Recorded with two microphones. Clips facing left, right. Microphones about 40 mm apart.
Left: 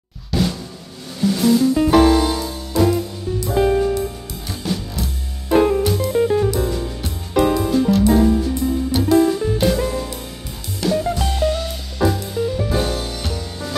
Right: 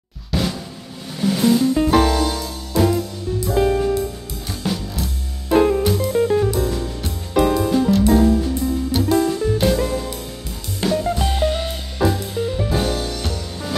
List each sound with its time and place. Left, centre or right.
0.3 s drum: centre
1.2 s music: centre
1.8 s music: centre
2.8 s music: centre
10.9 s music: centre
11.3 s music: right
12.0 s music: centre